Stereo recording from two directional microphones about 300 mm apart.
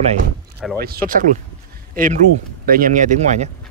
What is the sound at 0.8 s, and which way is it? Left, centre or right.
Speech, right.